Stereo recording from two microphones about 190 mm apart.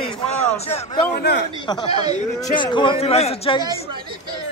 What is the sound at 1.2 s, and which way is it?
Speech, 60° left (ahead or behind).